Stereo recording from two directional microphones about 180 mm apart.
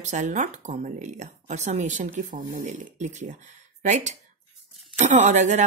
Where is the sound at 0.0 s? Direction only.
40° right (ahead or behind).